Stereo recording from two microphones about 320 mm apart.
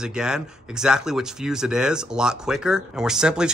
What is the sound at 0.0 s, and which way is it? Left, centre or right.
Speech, centre.